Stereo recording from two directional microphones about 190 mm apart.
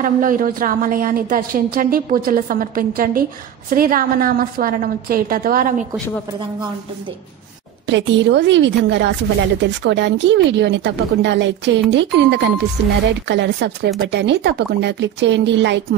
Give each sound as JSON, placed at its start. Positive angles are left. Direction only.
{"t": 0.0, "sound": "a woman's voice", "side_deg": -45}
{"t": 7.8, "sound": "a woman's voice", "side_deg": -70}